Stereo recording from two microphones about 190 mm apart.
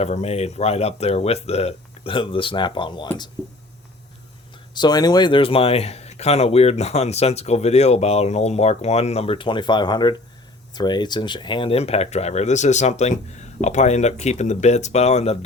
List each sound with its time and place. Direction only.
0.0 s a man's voice: 35° left (ahead or behind)
4.7 s a man's voice: 20° left (ahead or behind)